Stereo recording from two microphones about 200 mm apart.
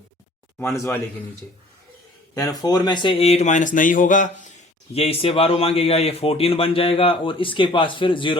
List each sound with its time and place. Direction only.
0.6 s a man's voice: 15° left (ahead or behind)
2.3 s speech: 20° left (ahead or behind); by 4.5 s 40° left (ahead or behind)
4.9 s speech: 30° left (ahead or behind)